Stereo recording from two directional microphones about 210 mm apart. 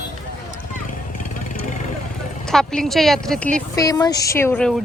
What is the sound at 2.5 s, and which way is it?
A woman's voice, centre (ahead or behind).